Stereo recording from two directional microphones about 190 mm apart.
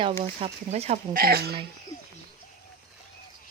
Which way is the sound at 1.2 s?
55° right (ahead or behind).